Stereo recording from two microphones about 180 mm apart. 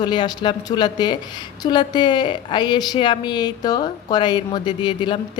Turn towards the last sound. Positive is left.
turn(degrees=25)  # may be behind; listen again after turning